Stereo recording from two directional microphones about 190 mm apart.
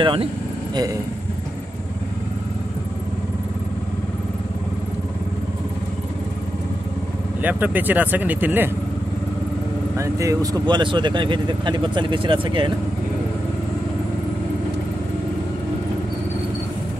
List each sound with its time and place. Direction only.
0.0 s speech: 25° right (ahead or behind)
7.4 s speech: 10° right (ahead or behind)
9.9 s speech: 15° right (ahead or behind)